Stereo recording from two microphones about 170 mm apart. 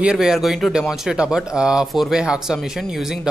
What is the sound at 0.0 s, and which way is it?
A man's voice, 5° right (ahead or behind).